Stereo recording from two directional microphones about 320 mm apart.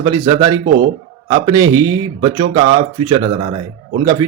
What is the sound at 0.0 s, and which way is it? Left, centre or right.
A man's voice, centre.